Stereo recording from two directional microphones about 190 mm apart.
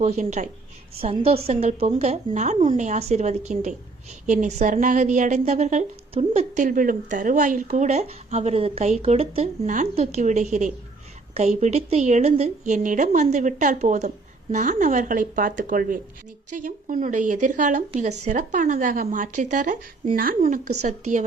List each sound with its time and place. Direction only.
0.0 s a woman's voice: 35° right (ahead or behind)